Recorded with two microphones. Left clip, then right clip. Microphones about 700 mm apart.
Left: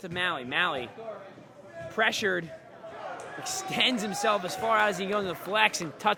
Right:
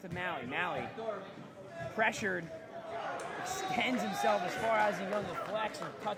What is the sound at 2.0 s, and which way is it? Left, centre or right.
Speech, left.